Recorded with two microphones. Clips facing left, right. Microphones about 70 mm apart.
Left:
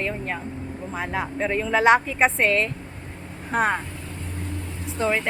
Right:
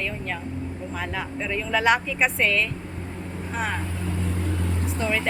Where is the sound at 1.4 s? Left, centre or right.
Left.